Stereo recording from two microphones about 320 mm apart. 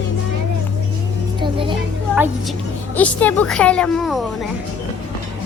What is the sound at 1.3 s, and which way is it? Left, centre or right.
Speech, centre.